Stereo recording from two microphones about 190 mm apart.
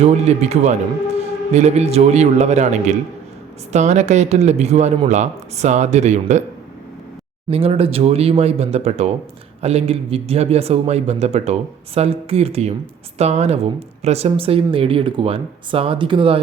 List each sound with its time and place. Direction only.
0.0 s speech: 35° right (ahead or behind)
7.5 s speech: 30° right (ahead or behind)